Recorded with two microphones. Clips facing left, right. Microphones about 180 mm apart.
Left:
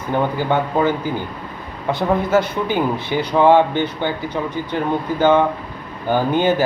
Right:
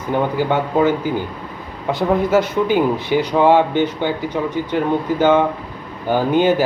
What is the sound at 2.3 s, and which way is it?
Speech, 15° right (ahead or behind).